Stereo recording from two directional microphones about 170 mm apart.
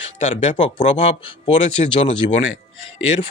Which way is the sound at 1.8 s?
40° left (ahead or behind).